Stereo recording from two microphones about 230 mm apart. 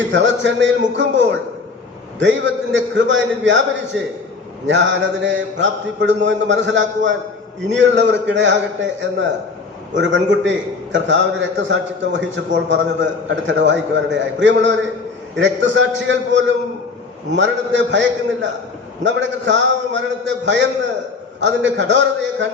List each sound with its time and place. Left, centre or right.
0.1 s a man's voice: right